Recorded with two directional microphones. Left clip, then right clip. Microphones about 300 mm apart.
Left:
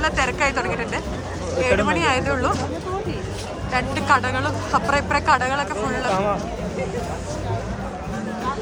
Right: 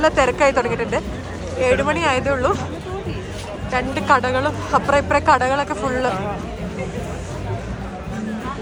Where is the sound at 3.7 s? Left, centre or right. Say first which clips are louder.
Right 2 dB; centre.